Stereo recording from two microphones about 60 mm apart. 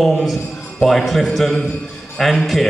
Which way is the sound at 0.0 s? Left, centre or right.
Centre.